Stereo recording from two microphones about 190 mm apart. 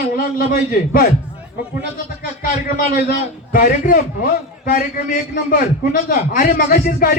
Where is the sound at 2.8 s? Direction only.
45° left (ahead or behind).